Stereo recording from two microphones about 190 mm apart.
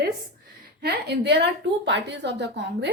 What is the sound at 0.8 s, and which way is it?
A woman's voice, 60° right (ahead or behind).